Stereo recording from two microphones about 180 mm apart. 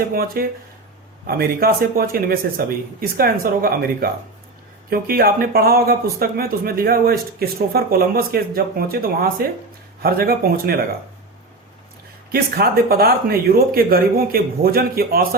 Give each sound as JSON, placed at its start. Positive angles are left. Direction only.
{"t": 0.1, "sound": "speech", "side_deg": -55}
{"t": 12.3, "sound": "speech", "side_deg": -55}